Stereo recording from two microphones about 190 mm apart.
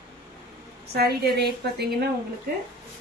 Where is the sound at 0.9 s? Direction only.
60° right (ahead or behind).